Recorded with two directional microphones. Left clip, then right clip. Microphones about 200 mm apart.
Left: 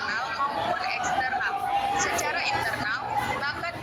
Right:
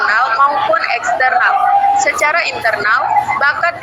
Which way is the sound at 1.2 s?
40° right (ahead or behind).